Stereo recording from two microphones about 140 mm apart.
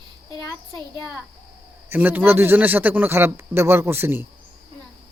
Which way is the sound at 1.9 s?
15° right (ahead or behind).